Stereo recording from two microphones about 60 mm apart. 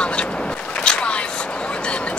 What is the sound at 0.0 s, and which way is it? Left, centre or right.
Vehicle, centre.